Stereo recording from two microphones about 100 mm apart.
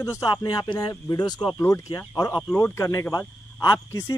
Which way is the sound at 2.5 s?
25° left (ahead or behind).